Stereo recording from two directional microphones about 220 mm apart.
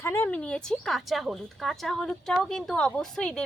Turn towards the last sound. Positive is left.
turn(degrees=5)  # may be behind; listen again after turning